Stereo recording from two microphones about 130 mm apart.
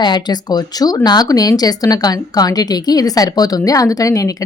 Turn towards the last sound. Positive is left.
turn(degrees=25)  # may be behind; listen again after turning